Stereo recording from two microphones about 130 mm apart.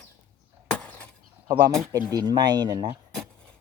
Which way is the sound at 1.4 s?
30° right (ahead or behind).